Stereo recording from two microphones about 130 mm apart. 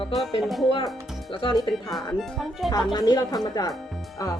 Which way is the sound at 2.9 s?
30° left (ahead or behind).